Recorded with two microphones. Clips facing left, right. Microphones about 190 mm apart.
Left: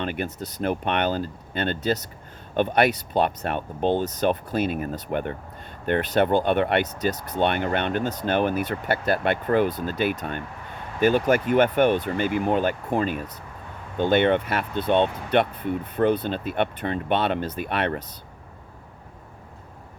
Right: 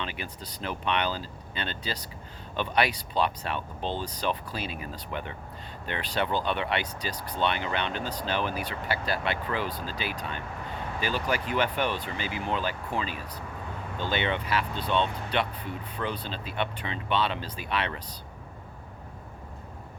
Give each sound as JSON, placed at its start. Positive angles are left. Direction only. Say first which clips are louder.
{"t": 0.0, "sound": "speech", "louder": "left 8 dB", "side_deg": 50}